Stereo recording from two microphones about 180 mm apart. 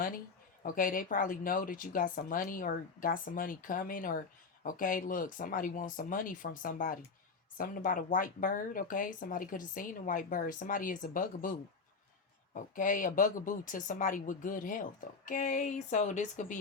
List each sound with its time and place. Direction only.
0.6 s speech: 50° left (ahead or behind)
12.5 s speech: 45° left (ahead or behind)